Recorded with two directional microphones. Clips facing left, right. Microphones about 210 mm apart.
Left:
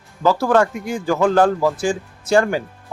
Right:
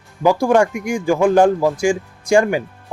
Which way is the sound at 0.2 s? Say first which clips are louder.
Right 2 dB; 15° right (ahead or behind).